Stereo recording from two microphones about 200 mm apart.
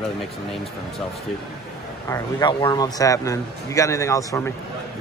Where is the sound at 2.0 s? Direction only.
20° left (ahead or behind).